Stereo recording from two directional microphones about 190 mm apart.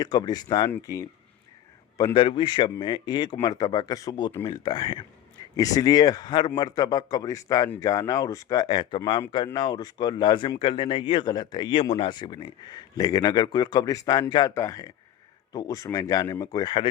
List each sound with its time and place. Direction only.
0.0 s speech: 20° left (ahead or behind)